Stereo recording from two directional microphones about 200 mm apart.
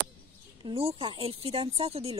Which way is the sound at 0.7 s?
30° right (ahead or behind).